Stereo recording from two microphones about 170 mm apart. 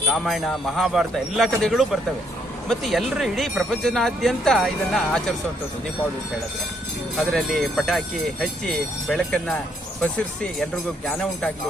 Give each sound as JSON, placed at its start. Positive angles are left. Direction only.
{"t": 0.1, "sound": "speech", "side_deg": 0}
{"t": 7.2, "sound": "speech", "side_deg": 0}